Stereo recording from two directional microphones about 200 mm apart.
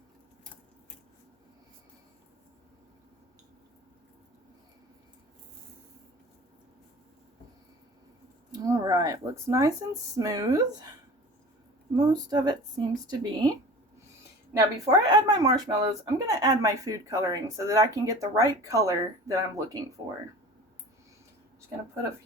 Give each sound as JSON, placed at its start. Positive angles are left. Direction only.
{"t": 8.5, "sound": "speech", "side_deg": -15}
{"t": 11.9, "sound": "speech", "side_deg": -20}
{"t": 14.8, "sound": "speech", "side_deg": -15}